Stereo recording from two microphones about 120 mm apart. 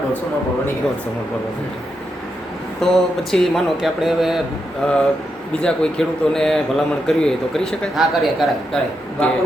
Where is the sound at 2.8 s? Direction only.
5° left (ahead or behind).